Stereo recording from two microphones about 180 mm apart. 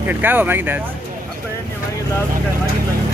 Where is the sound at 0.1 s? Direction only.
10° right (ahead or behind).